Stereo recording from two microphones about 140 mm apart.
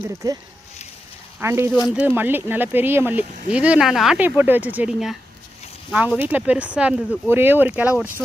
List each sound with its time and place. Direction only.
1.4 s speech: 15° right (ahead or behind)
4.2 s speech: 15° right (ahead or behind)